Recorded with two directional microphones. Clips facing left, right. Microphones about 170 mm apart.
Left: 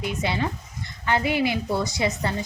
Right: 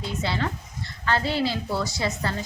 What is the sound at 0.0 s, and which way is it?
A woman's voice, 15° left (ahead or behind).